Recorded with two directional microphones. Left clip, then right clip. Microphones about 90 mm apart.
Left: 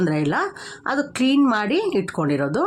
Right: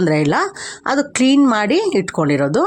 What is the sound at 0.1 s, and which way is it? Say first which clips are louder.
A woman's voice: right 6 dB; 45° right (ahead or behind).